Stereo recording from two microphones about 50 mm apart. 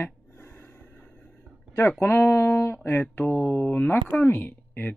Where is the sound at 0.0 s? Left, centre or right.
Left.